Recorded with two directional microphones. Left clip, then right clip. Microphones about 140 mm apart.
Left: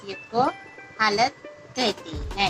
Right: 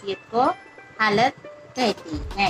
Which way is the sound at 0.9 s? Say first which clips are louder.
Right 2 dB; 30° right (ahead or behind).